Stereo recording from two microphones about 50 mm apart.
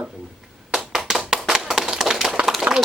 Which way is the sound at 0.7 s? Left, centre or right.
Centre.